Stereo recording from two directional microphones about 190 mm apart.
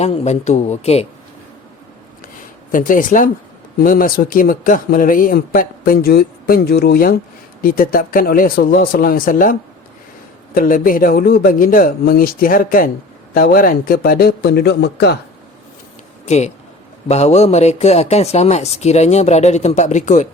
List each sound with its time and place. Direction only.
0.0 s speech: 35° left (ahead or behind)
2.7 s speech: 45° left (ahead or behind)
16.2 s speech: 35° left (ahead or behind)